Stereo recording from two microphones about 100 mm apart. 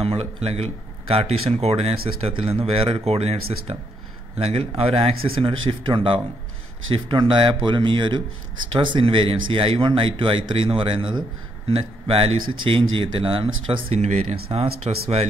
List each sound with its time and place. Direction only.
0.0 s speech: 85° right; by 2.5 s 60° right (ahead or behind)
2.6 s speech: 75° right (ahead or behind); by 3.7 s 90° right
4.4 s speech: 75° right (ahead or behind); by 11.2 s 55° right (ahead or behind)
11.7 s speech: 70° right (ahead or behind)